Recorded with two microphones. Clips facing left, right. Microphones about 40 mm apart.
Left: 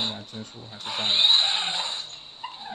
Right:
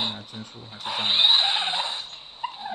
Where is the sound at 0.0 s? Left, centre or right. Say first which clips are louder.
Right 1 dB; centre.